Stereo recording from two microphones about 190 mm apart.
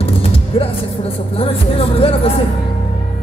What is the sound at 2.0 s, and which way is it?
Music, 30° left (ahead or behind).